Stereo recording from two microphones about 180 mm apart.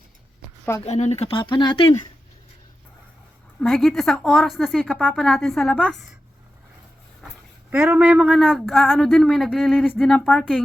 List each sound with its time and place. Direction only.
0.9 s speech: 40° left (ahead or behind)
3.6 s a woman's voice: centre (ahead or behind)
7.7 s a woman's voice: 10° right (ahead or behind); by 10.4 s 5° left (ahead or behind)